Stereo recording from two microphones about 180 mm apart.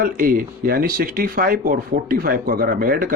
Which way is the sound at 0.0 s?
50° right (ahead or behind).